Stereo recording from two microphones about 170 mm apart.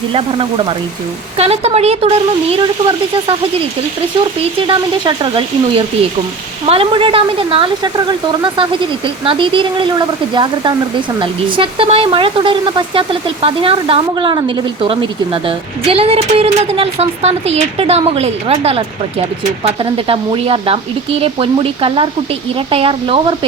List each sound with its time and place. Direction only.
0.1 s speech: 30° right (ahead or behind)
4.6 s speech: 30° right (ahead or behind)